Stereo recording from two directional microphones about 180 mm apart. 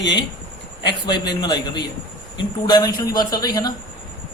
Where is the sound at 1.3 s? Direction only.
25° left (ahead or behind).